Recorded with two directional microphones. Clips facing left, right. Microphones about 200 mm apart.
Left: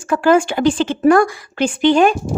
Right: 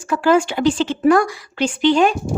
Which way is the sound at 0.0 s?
50° left (ahead or behind).